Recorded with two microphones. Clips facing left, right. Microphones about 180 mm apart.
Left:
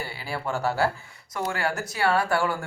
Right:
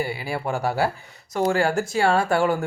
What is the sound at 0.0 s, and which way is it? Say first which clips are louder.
Speech: right 5 dB; 15° right (ahead or behind).